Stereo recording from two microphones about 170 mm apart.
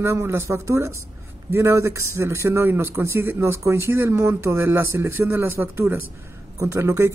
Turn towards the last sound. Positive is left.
turn(degrees=-15)  # may be behind; listen again after turning